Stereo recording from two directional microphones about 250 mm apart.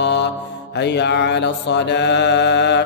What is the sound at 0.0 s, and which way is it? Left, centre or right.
Mantra, left.